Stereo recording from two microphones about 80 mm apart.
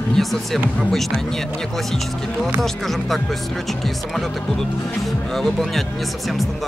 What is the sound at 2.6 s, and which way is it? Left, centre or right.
Speech, centre.